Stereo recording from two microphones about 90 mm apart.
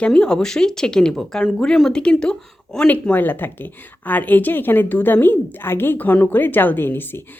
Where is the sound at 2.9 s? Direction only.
20° left (ahead or behind).